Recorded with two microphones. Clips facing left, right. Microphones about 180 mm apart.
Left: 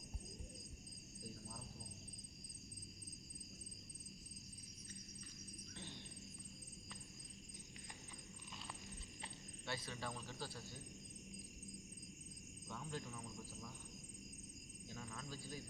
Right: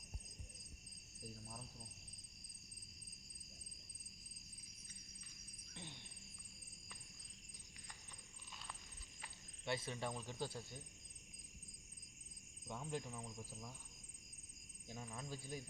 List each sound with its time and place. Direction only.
9.6 s speech: 20° right (ahead or behind)
12.6 s speech: 15° right (ahead or behind)
14.9 s speech: 15° right (ahead or behind)